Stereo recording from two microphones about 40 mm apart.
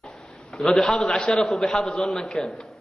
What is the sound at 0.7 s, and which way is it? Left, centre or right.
A man's voice, centre.